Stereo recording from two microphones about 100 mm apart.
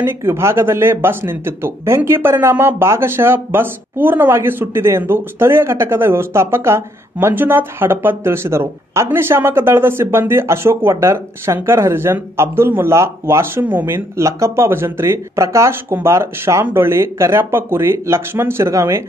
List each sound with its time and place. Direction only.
0.0 s speech: 25° right (ahead or behind)